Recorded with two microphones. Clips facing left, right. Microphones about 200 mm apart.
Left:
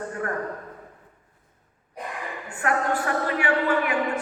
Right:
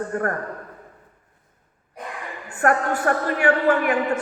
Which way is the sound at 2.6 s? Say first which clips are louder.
Right 5 dB; 50° right (ahead or behind).